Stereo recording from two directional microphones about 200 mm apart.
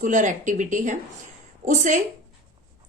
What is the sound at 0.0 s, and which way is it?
Speech, 40° right (ahead or behind).